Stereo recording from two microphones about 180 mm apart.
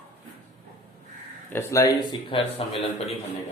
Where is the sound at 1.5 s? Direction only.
15° left (ahead or behind).